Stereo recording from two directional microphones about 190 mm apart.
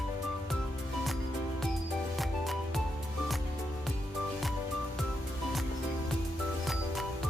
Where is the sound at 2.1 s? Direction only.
Centre (ahead or behind).